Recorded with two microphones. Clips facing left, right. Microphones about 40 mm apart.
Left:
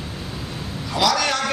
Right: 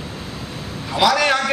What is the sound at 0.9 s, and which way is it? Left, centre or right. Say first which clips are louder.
Speech: right 4 dB; centre.